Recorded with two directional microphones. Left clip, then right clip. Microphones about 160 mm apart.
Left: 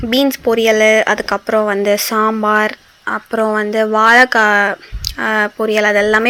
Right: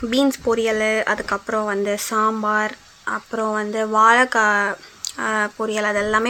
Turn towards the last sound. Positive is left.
turn(degrees=20)  # may be behind; listen again after turning